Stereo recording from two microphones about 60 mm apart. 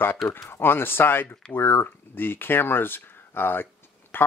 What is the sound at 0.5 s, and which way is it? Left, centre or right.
Speech, left.